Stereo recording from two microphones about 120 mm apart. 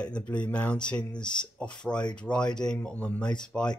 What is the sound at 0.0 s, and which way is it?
Speech, 10° left (ahead or behind).